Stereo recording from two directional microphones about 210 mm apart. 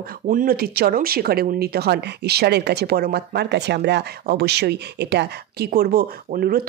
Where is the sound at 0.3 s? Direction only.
40° right (ahead or behind).